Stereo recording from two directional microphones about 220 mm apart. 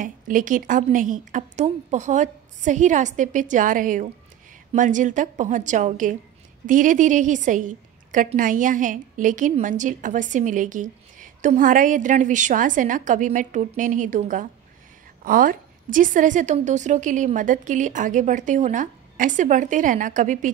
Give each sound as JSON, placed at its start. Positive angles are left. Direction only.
{"t": 0.0, "sound": "a woman's voice", "side_deg": -35}